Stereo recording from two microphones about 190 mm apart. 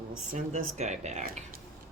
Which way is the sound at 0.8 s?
35° right (ahead or behind).